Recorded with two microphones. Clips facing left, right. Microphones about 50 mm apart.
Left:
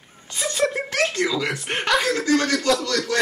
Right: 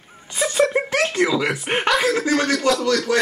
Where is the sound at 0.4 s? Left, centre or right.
Centre.